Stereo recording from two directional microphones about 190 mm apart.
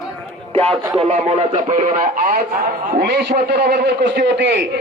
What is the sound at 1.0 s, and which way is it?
A man's voice, 35° right (ahead or behind).